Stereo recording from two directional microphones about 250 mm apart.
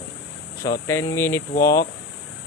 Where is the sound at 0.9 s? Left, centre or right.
Centre.